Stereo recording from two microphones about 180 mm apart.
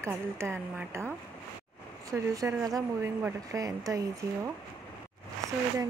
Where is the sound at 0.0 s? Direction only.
15° right (ahead or behind).